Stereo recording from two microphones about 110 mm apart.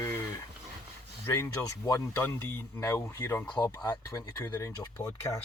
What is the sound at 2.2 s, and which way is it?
Speech, 20° left (ahead or behind).